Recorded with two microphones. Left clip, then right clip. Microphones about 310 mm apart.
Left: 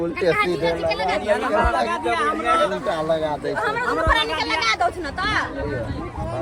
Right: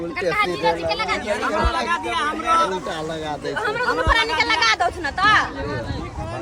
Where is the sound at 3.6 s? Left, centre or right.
Right.